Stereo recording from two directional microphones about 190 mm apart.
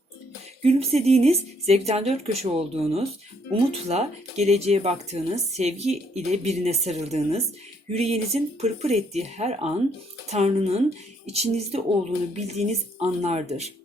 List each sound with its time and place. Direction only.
0.6 s speech: 35° right (ahead or behind)